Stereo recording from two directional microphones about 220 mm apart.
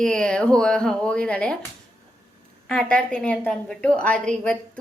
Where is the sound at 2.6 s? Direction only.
5° left (ahead or behind).